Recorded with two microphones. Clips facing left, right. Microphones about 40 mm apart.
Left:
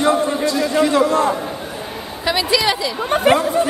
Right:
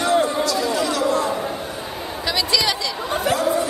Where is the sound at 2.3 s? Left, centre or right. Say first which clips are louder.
Left 4 dB; centre.